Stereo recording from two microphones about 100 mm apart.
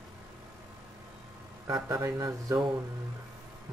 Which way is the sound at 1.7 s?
30° right (ahead or behind).